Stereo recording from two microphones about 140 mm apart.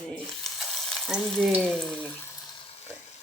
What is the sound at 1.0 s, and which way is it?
Speech, centre (ahead or behind).